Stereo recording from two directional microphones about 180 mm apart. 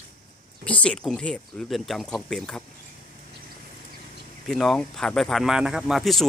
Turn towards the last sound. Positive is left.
turn(degrees=0)  # may be behind; listen again after turning